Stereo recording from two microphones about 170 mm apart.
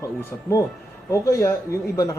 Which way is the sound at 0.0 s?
20° left (ahead or behind).